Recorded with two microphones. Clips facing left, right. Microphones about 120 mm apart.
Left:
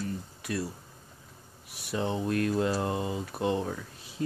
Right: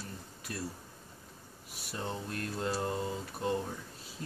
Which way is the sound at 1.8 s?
90° left.